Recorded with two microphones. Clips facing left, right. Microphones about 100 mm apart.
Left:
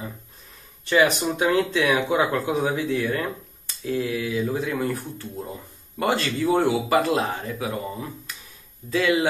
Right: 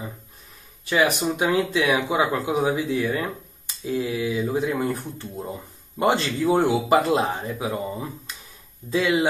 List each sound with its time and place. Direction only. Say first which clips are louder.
0.8 s speech: left 1 dB; 5° right (ahead or behind)